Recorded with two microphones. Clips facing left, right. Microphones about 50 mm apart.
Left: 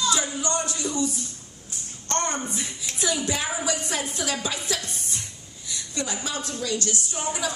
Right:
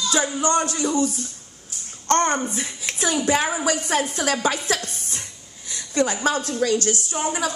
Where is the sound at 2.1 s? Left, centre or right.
Right.